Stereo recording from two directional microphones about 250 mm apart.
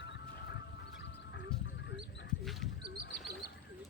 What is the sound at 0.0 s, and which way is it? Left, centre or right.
Music, left.